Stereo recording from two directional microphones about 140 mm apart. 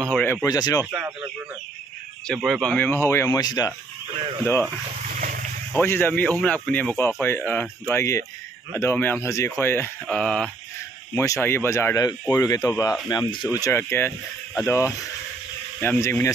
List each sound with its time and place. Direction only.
0.2 s speech: 10° left (ahead or behind)
0.5 s speech: 25° left (ahead or behind)
0.9 s speech: 10° right (ahead or behind); by 3.7 s 25° left (ahead or behind)
5.7 s speech: 15° left (ahead or behind)
11.1 s speech: 20° left (ahead or behind)